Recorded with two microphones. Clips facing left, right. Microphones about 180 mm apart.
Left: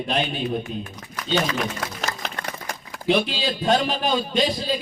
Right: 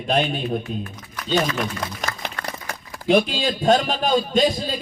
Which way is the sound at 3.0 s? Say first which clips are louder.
Right 3 dB; 45° right (ahead or behind).